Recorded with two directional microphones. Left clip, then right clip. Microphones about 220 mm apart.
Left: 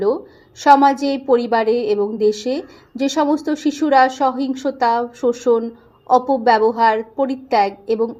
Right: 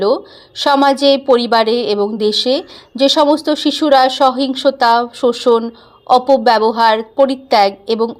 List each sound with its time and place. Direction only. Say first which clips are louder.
0.6 s speech: right 1 dB; 15° right (ahead or behind)